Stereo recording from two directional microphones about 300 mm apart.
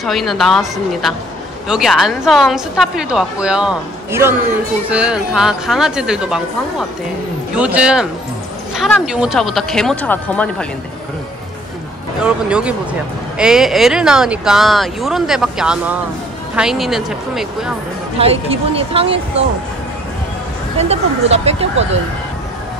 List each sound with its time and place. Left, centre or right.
0.0 s a woman's voice: centre
7.5 s a woman's voice: centre
12.2 s a woman's voice: centre
18.1 s speech: centre
20.7 s speech: right